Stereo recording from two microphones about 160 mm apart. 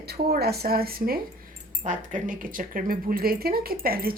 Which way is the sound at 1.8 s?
55° right (ahead or behind).